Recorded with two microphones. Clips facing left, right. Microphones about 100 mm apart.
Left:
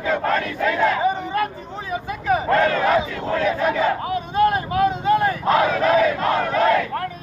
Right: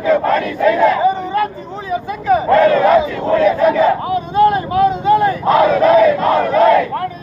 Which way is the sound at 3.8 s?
20° right (ahead or behind).